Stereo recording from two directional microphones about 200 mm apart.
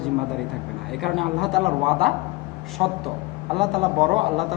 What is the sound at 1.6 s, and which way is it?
Speech, 25° right (ahead or behind).